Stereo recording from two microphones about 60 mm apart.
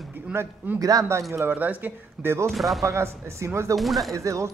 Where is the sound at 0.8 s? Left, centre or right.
Right.